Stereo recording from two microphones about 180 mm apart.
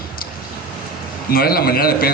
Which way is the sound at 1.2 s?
55° left (ahead or behind).